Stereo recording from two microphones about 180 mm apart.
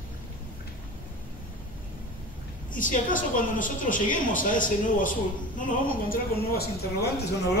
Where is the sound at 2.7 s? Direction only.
45° left (ahead or behind).